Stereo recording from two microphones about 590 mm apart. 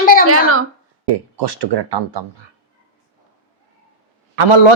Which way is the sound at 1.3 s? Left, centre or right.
Right.